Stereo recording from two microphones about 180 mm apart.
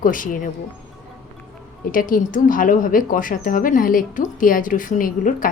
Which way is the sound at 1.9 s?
50° left (ahead or behind).